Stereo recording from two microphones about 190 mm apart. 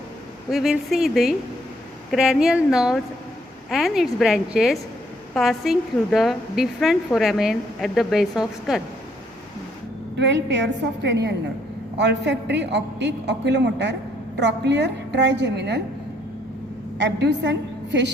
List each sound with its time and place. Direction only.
0.5 s a woman's voice: centre (ahead or behind)
10.2 s a woman's voice: 70° right (ahead or behind)
17.0 s a woman's voice: 70° right (ahead or behind)